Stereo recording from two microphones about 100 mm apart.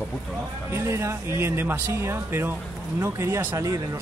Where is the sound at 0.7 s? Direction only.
25° right (ahead or behind).